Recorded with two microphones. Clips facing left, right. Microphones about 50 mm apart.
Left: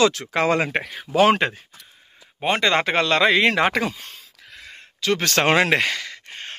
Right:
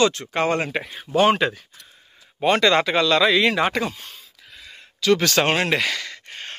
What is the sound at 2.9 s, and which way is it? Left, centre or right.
Speech, left.